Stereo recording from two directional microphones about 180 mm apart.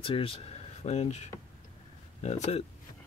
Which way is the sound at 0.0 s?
30° left (ahead or behind).